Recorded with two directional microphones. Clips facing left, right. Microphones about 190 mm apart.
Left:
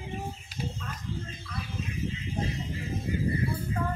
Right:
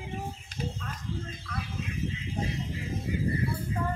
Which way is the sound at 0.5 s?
5° left (ahead or behind).